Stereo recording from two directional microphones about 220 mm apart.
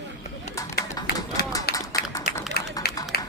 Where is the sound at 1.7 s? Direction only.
45° left (ahead or behind).